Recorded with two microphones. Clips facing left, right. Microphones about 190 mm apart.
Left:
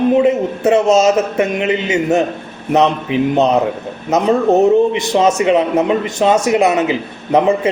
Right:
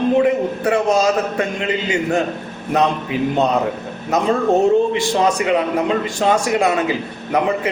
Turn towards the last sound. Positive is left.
turn(degrees=25)  # may be behind; listen again after turning